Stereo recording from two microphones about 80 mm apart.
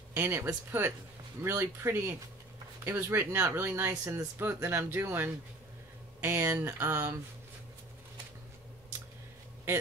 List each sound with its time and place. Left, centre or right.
0.1 s speech: right